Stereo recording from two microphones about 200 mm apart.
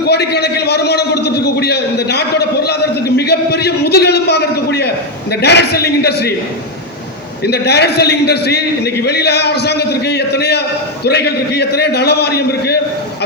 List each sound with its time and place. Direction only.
0.1 s a man's voice: 55° left (ahead or behind)
3.2 s a sound: 55° left (ahead or behind)
5.3 s a man's voice: 55° left (ahead or behind)
7.4 s a man's voice: 55° left (ahead or behind)